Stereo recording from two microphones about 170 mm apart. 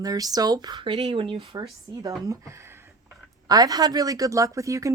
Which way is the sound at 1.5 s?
20° right (ahead or behind).